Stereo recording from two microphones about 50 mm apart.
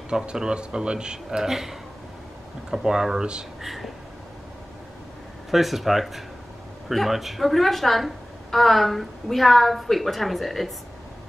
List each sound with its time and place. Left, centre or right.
0.1 s a man's voice: centre
3.6 s a woman's voice: centre
5.5 s a woman's voice: centre